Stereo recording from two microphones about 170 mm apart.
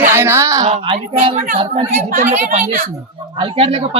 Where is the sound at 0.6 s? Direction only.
35° right (ahead or behind).